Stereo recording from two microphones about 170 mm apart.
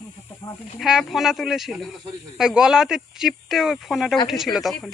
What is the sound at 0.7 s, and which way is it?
Speech, centre (ahead or behind).